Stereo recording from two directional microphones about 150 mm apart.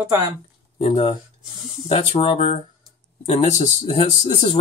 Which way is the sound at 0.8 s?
35° left (ahead or behind).